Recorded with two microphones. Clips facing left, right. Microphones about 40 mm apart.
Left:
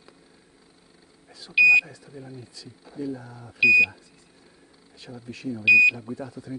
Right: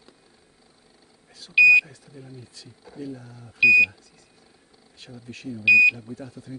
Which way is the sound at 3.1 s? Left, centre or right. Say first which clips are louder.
Left 3 dB; left.